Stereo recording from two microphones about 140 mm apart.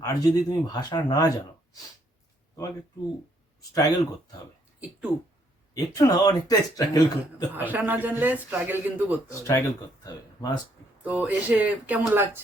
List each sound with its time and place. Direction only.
0.0 s a man's voice: 25° left (ahead or behind)
3.8 s a man's voice: 25° left (ahead or behind)
5.7 s a man's voice: 25° left (ahead or behind)
7.5 s speech: 15° right (ahead or behind)
9.3 s a man's voice: 20° left (ahead or behind)
11.0 s speech: 10° right (ahead or behind)